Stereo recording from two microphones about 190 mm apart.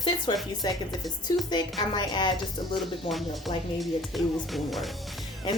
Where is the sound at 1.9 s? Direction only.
25° left (ahead or behind).